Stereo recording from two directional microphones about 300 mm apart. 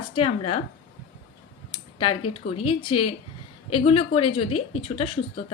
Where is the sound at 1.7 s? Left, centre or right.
Centre.